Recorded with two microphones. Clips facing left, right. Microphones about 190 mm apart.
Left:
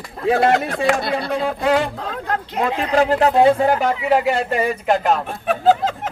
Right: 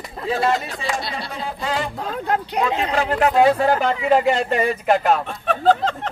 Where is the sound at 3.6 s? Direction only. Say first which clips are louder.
Left 1 dB; 15° left (ahead or behind).